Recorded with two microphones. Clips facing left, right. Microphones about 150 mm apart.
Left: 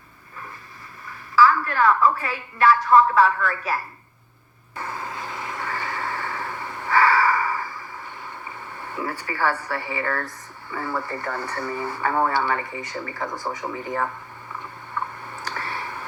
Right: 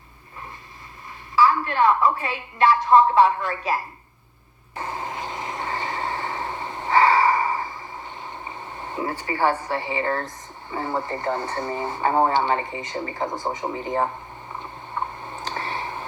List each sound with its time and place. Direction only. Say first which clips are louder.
1.0 s a woman's voice: left 1 dB; 25° right (ahead or behind)
4.7 s vehicle: right 2 dB; 20° right (ahead or behind)
14.5 s a sound: even; 20° right (ahead or behind)